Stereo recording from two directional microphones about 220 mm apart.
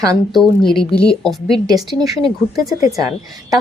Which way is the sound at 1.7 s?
15° right (ahead or behind).